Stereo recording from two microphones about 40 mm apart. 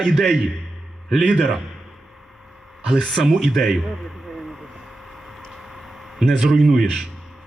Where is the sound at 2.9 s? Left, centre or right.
Centre.